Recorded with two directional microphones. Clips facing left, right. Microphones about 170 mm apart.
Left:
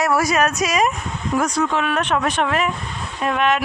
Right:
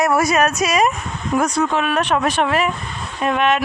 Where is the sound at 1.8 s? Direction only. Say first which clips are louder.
Right 2 dB; 15° right (ahead or behind).